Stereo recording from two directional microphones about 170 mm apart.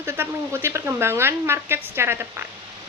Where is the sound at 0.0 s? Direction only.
15° right (ahead or behind).